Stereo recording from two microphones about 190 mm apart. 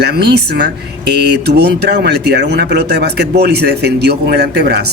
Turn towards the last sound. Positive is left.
turn(degrees=-60)  # may be behind; listen again after turning